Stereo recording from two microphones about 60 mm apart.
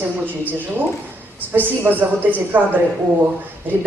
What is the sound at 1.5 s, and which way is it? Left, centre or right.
Speech, right.